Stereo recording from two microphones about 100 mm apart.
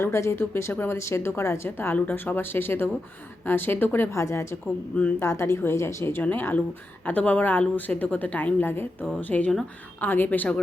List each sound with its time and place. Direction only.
0.0 s a woman's voice: 25° left (ahead or behind)